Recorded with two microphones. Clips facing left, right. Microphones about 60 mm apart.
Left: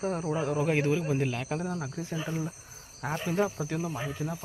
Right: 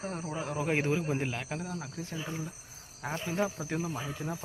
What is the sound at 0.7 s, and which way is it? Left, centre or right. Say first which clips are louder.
Speech: right 1 dB; centre.